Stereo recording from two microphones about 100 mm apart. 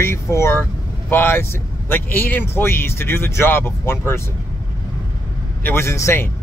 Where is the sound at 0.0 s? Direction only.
25° left (ahead or behind).